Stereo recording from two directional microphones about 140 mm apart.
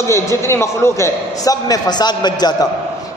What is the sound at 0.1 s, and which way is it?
A man's voice, 20° left (ahead or behind).